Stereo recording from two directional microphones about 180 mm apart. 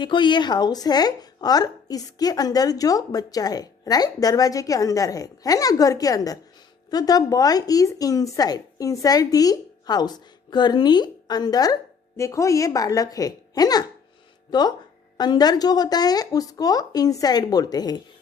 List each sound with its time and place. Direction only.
0.0 s speech: 25° left (ahead or behind)